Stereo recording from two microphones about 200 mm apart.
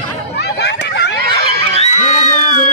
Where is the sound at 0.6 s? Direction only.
60° left (ahead or behind).